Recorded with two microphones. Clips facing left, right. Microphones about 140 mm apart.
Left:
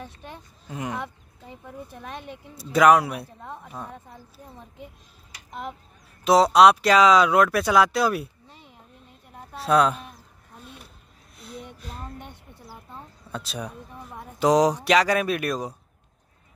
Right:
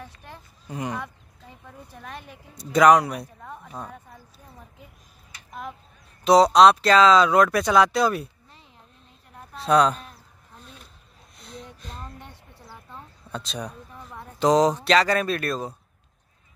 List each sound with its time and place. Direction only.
0.0 s speech: 20° left (ahead or behind)
0.7 s a man's voice: centre (ahead or behind)
0.9 s speech: 20° left (ahead or behind)
2.7 s a man's voice: 5° left (ahead or behind)
6.2 s speech: 5° left (ahead or behind)
9.6 s a man's voice: 5° left (ahead or behind)
11.3 s a sound: 5° left (ahead or behind)
13.3 s speech: 5° left (ahead or behind)